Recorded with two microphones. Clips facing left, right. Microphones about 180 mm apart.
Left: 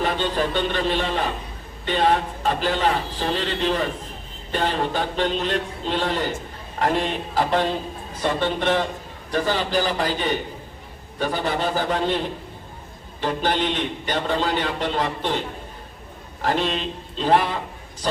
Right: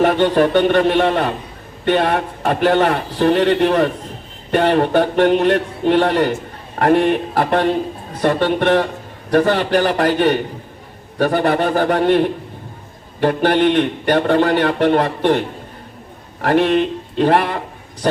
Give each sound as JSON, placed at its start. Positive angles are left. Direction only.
{"t": 0.0, "sound": "a man's voice", "side_deg": -70}